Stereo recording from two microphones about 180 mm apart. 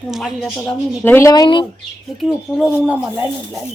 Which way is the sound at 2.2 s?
Centre (ahead or behind).